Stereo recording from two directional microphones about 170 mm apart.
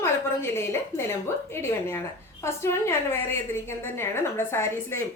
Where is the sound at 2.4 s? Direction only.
15° left (ahead or behind).